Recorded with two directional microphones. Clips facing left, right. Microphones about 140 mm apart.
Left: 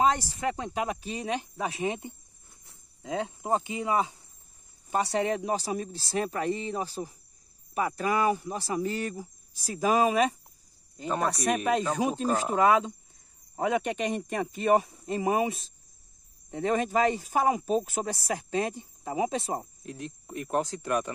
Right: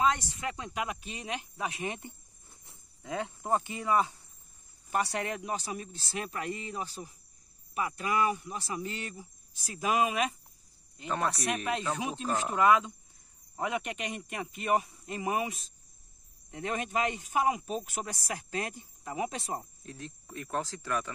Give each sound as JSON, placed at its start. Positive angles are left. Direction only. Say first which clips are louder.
{"t": 0.0, "sound": "speech", "louder": "left 4 dB", "side_deg": 35}
{"t": 3.0, "sound": "speech", "louder": "left 4 dB", "side_deg": 20}